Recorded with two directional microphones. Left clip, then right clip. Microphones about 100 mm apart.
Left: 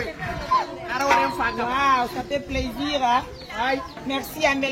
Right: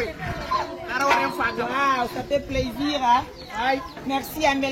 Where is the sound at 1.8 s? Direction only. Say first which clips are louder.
Left 2 dB; 35° left (ahead or behind).